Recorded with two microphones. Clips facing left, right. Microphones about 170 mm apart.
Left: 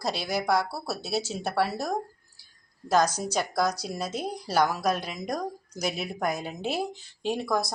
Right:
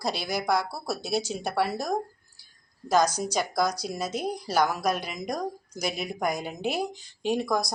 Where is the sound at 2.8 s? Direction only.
10° left (ahead or behind).